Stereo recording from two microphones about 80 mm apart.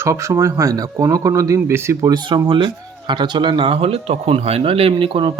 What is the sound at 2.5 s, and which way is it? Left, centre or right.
Speech, right.